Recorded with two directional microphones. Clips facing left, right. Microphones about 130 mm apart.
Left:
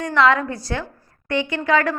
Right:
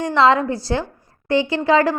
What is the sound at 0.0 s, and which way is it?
A woman's voice, 30° right (ahead or behind).